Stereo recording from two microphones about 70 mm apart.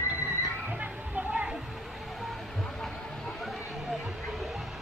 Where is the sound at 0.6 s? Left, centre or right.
Centre.